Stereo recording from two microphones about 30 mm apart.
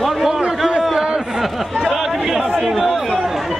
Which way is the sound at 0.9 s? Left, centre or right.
Right.